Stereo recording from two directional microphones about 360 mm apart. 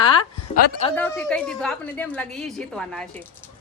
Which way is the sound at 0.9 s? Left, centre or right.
Centre.